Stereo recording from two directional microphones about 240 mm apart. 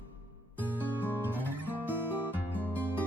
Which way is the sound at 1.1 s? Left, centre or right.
Centre.